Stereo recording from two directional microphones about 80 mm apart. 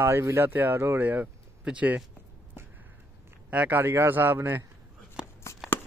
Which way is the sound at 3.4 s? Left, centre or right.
Right.